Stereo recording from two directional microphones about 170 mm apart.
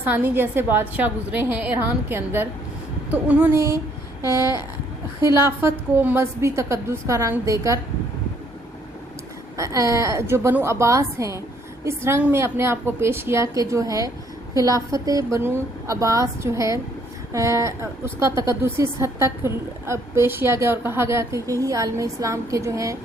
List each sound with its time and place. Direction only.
0.0 s a woman's voice: 10° right (ahead or behind)
9.6 s a woman's voice: 20° right (ahead or behind)